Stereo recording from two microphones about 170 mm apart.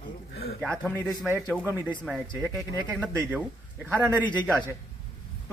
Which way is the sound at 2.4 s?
20° left (ahead or behind).